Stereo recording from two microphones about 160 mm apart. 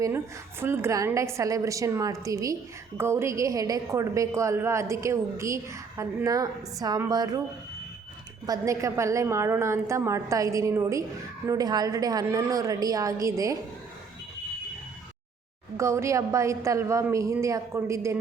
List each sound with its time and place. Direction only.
0.6 s a woman's voice: 15° right (ahead or behind)
8.4 s a woman's voice: 20° right (ahead or behind)
15.8 s a woman's voice: 20° right (ahead or behind)